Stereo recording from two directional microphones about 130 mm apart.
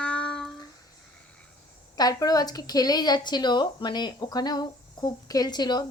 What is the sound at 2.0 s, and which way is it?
Speech, 30° left (ahead or behind).